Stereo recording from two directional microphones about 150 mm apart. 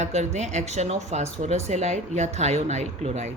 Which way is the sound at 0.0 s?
50° right (ahead or behind).